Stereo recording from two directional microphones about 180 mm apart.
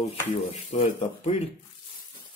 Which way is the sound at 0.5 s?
40° left (ahead or behind).